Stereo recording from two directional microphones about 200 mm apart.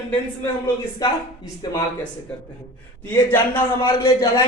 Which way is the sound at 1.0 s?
20° left (ahead or behind).